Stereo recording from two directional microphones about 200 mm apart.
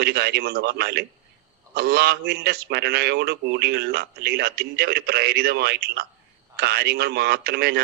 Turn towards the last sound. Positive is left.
turn(degrees=-55)  # may be behind; listen again after turning